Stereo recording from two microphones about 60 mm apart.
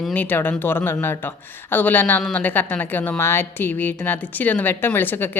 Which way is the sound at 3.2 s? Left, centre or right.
Left.